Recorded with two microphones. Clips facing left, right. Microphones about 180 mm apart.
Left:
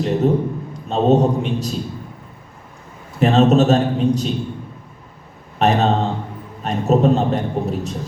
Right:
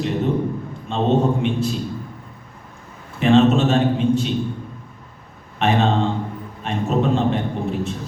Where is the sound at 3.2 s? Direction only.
40° left (ahead or behind).